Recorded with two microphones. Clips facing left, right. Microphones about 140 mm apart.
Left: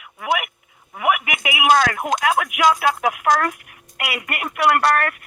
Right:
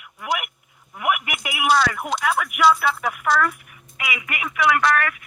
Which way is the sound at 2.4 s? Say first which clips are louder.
Left 3 dB; 90° left.